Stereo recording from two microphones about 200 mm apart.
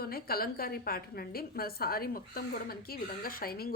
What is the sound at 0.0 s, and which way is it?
A woman's voice, 50° left (ahead or behind).